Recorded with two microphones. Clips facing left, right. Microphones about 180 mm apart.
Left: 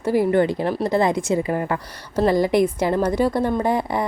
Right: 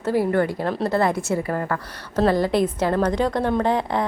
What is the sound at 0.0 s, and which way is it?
A woman's voice, 15° left (ahead or behind).